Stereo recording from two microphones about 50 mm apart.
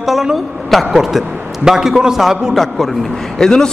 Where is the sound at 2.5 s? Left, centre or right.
Centre.